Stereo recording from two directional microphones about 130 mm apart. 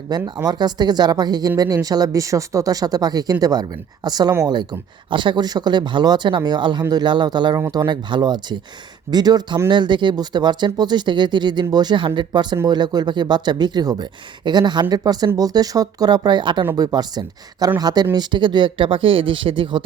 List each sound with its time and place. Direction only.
0.1 s speech: 30° right (ahead or behind)